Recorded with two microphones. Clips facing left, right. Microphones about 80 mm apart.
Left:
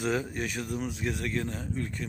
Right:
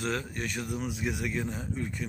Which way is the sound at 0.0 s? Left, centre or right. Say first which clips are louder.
Left 3 dB; centre.